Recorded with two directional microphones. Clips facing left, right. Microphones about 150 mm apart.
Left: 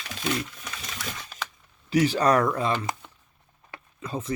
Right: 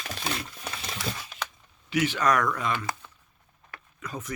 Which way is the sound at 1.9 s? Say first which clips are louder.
Left 4 dB; 35° left (ahead or behind).